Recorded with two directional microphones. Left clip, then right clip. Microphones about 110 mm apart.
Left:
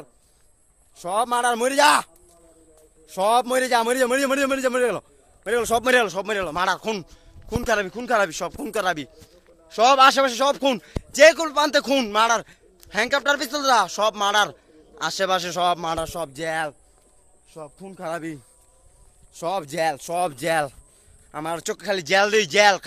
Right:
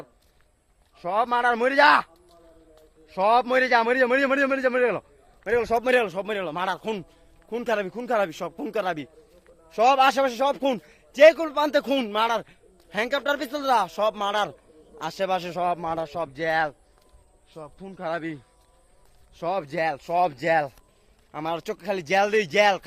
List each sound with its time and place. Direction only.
0.9 s speech: 40° left (ahead or behind)
3.1 s speech: 35° left (ahead or behind)
15.7 s speech: 55° left (ahead or behind)
16.5 s speech: 30° left (ahead or behind)
19.3 s speech: 40° left (ahead or behind)
21.3 s speech: 35° left (ahead or behind)